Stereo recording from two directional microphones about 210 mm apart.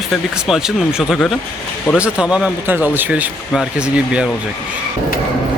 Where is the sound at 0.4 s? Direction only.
5° right (ahead or behind).